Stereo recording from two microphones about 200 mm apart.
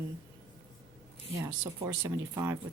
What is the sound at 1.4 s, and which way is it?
Speech, 15° right (ahead or behind).